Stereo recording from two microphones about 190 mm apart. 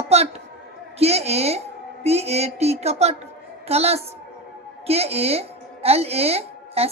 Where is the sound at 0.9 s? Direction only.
35° right (ahead or behind).